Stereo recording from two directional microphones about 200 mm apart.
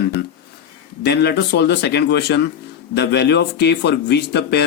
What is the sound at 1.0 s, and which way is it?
Speech, 55° left (ahead or behind).